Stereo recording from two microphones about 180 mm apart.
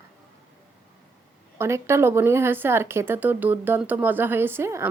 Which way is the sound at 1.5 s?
15° right (ahead or behind).